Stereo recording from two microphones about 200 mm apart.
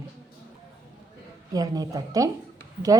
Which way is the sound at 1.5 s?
20° right (ahead or behind).